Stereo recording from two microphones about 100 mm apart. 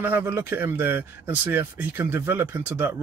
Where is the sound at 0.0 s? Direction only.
20° right (ahead or behind).